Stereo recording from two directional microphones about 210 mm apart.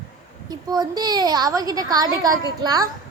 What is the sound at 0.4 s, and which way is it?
A woman's voice, 20° right (ahead or behind).